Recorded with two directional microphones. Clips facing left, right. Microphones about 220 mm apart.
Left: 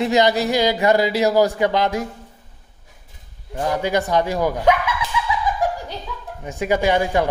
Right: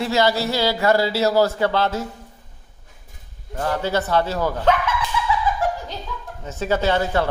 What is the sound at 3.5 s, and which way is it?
Speech, 15° left (ahead or behind).